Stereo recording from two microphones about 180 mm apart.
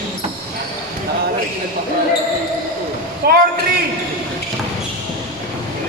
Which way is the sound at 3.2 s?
60° right (ahead or behind).